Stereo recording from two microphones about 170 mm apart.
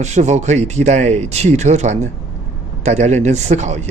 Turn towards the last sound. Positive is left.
turn(degrees=-40)  # may be behind; listen again after turning